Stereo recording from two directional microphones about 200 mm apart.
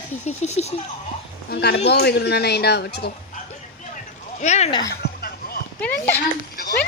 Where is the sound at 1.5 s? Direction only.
55° left (ahead or behind).